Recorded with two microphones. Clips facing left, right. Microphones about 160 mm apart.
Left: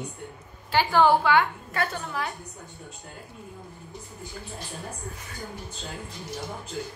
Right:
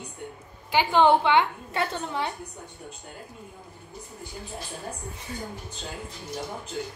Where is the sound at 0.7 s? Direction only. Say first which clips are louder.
Right 1 dB; 20° right (ahead or behind).